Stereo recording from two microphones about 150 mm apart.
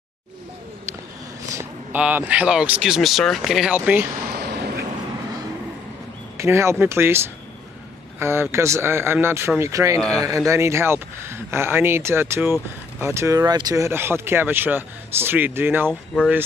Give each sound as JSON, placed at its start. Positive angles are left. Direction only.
{"t": 1.5, "sound": "a sound", "side_deg": -20}
{"t": 2.0, "sound": "speech", "side_deg": -10}
{"t": 4.3, "sound": "a sound", "side_deg": -90}
{"t": 6.3, "sound": "speech", "side_deg": -20}
{"t": 8.2, "sound": "speech", "side_deg": -15}
{"t": 10.0, "sound": "speech", "side_deg": 5}
{"t": 10.2, "sound": "speech", "side_deg": -20}